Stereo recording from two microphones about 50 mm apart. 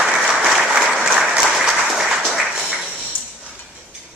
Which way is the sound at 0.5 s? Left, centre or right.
Centre.